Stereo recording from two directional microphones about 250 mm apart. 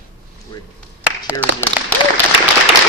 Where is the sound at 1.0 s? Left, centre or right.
Centre.